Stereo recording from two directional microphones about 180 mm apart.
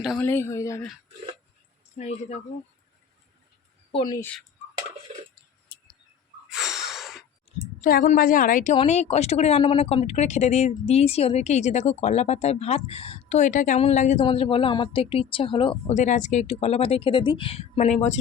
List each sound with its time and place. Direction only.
0.0 s speech: centre (ahead or behind)
0.3 s speech: 15° left (ahead or behind)
2.0 s speech: 40° left (ahead or behind)
3.9 s a woman's voice: 25° left (ahead or behind)
6.5 s a sound: centre (ahead or behind)
7.8 s a woman's voice: 50° left (ahead or behind)
8.7 s speech: 35° left (ahead or behind)